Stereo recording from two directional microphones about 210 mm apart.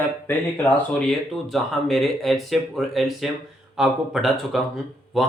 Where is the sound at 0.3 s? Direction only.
10° left (ahead or behind).